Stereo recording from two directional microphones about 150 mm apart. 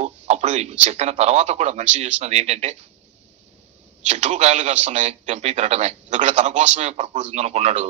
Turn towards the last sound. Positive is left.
turn(degrees=-50)  # may be behind; listen again after turning